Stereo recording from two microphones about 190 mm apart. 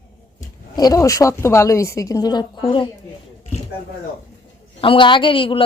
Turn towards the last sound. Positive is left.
turn(degrees=25)  # may be behind; listen again after turning